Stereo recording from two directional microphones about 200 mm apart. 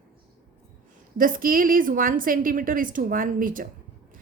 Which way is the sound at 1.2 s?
45° right (ahead or behind).